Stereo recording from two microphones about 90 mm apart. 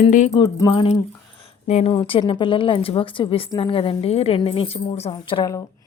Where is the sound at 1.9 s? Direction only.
85° left.